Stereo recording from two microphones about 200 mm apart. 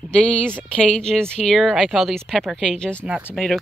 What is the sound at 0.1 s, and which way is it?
Speech, 5° left (ahead or behind).